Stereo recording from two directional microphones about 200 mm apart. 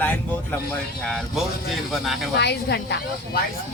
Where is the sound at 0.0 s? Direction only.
10° left (ahead or behind).